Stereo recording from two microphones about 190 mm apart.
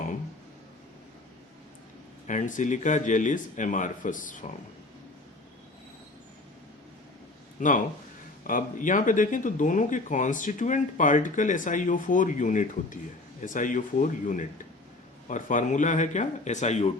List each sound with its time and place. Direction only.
2.2 s speech: 40° left (ahead or behind)
7.6 s speech: 40° left (ahead or behind)